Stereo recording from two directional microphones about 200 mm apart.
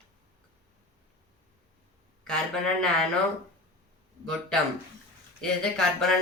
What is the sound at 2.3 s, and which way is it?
Speech, 5° left (ahead or behind).